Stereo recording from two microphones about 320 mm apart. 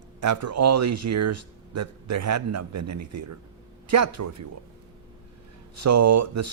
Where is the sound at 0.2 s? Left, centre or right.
Right.